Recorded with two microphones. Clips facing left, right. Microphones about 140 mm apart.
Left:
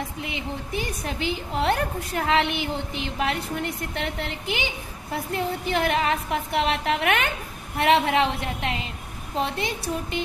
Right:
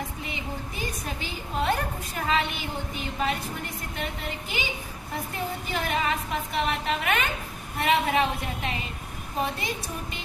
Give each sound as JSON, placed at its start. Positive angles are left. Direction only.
{"t": 0.2, "sound": "a woman's voice", "side_deg": 70}